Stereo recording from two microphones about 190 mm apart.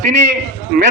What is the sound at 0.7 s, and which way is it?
Speech, 50° right (ahead or behind).